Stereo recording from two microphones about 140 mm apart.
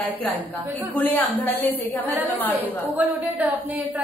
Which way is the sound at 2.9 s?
10° right (ahead or behind).